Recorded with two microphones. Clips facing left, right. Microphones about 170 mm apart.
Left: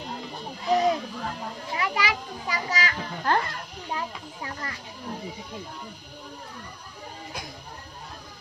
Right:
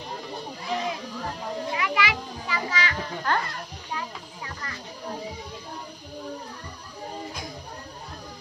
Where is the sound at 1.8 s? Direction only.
40° left (ahead or behind).